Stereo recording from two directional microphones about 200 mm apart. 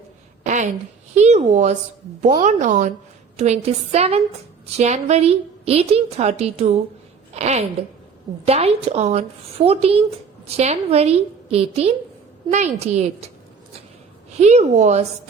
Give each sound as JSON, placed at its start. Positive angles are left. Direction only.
{"t": 0.4, "sound": "a sound", "side_deg": -35}
{"t": 1.1, "sound": "a woman's voice", "side_deg": -35}
{"t": 14.3, "sound": "a woman's voice", "side_deg": -35}